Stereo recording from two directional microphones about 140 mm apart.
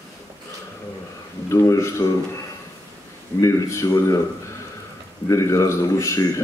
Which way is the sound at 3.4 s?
20° left (ahead or behind).